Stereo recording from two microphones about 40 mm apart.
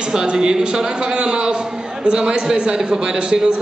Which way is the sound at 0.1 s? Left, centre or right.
Centre.